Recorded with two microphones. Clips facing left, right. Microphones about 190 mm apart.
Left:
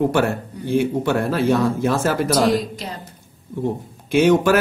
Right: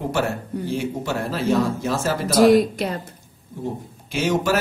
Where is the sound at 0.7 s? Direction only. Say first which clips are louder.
Left 8 dB; 60° left (ahead or behind).